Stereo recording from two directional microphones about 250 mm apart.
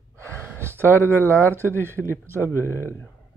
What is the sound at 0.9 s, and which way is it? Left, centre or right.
Speech, centre.